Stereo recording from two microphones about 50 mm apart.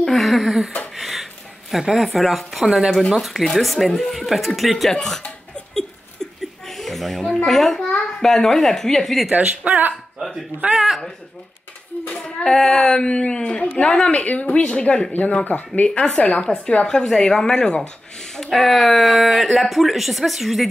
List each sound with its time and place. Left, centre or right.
0.0 s a sound: centre
1.7 s a woman's voice: centre
6.7 s a sound: centre
7.4 s a woman's voice: centre
9.6 s speech: right
10.7 s speech: centre
12.4 s a woman's voice: centre
13.8 s a woman's voice: centre
14.1 s a woman's voice: left
15.4 s speech: left
15.9 s a woman's voice: centre
18.3 s speech: centre